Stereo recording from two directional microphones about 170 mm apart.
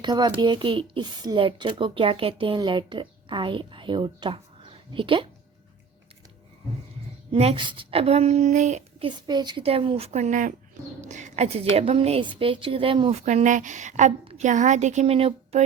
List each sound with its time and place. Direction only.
0.0 s a woman's voice: 25° right (ahead or behind)
7.3 s a woman's voice: 35° right (ahead or behind)
9.0 s a woman's voice: 25° right (ahead or behind)
13.2 s a woman's voice: 45° right (ahead or behind)